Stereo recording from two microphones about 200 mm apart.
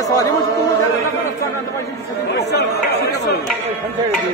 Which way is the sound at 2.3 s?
55° left (ahead or behind).